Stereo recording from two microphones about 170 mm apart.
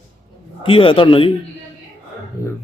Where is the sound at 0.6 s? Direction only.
30° left (ahead or behind).